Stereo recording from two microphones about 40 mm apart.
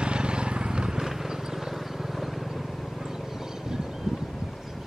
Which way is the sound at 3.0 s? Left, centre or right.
Centre.